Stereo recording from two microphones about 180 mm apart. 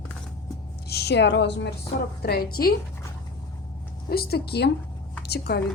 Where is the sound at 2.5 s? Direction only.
55° left (ahead or behind).